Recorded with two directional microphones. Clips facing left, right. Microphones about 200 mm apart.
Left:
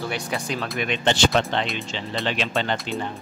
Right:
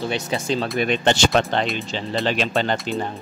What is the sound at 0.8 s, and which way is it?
Speech, 40° right (ahead or behind).